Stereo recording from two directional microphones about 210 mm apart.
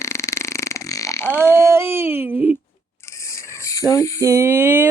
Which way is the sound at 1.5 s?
10° right (ahead or behind).